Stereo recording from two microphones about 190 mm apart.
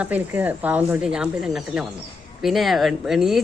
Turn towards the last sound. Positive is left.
turn(degrees=0)  # may be behind; listen again after turning